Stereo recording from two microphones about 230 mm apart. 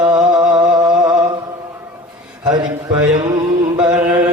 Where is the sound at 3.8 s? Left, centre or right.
Centre.